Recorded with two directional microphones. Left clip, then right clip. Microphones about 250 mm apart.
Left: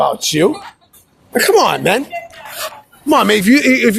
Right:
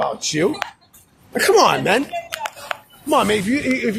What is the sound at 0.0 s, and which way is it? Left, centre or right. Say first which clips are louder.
Speech: left 7 dB; left.